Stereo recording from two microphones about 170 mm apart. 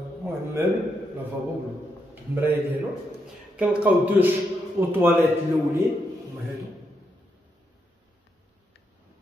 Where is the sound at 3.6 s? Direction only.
10° right (ahead or behind).